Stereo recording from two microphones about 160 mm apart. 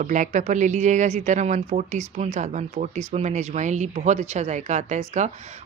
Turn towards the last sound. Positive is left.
turn(degrees=-45)  # may be behind; listen again after turning